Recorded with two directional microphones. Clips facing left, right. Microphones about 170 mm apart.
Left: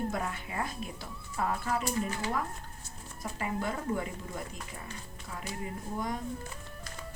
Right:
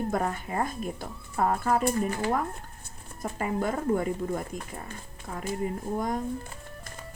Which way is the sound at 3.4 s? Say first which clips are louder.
Right 6 dB; 45° right (ahead or behind).